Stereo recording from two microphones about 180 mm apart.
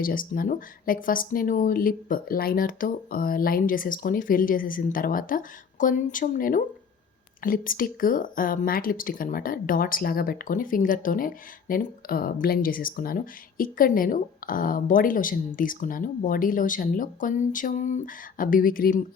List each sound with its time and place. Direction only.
0.0 s speech: 50° left (ahead or behind)